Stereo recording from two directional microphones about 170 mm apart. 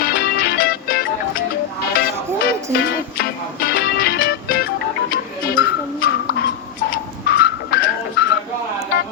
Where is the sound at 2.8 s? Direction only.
60° left (ahead or behind).